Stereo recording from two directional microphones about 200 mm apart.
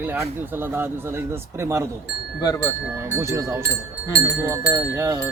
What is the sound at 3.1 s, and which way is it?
Wind chime, 15° right (ahead or behind).